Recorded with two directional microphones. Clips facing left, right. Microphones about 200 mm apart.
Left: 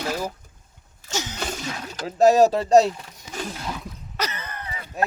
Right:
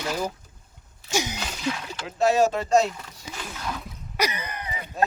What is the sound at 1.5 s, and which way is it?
Speech, 40° left (ahead or behind).